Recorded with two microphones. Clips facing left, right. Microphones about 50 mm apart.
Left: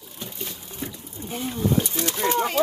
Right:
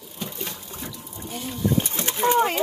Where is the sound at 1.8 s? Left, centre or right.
Right.